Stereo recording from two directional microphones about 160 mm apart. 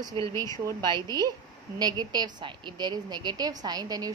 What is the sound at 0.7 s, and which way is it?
Speech, 25° right (ahead or behind).